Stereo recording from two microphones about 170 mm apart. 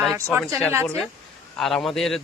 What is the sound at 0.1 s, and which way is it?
Speech, 15° right (ahead or behind).